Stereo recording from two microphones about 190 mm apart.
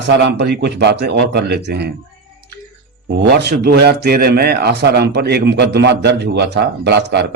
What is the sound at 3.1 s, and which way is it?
A man's voice, 60° right (ahead or behind).